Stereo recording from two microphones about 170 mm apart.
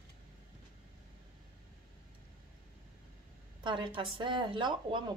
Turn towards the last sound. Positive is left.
turn(degrees=-30)  # may be behind; listen again after turning